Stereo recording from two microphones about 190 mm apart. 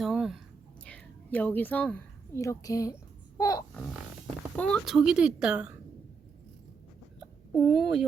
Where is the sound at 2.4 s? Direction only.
15° left (ahead or behind).